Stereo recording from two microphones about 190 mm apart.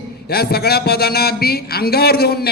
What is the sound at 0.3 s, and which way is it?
A man's voice, 55° left (ahead or behind).